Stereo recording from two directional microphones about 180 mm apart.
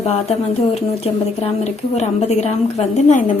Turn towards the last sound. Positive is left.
turn(degrees=40)  # may be behind; listen again after turning